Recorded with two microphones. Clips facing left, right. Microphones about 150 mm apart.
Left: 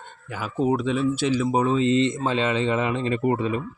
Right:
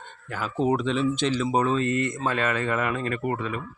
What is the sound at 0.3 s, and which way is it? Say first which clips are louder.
Speech: left 1 dB; 10° left (ahead or behind).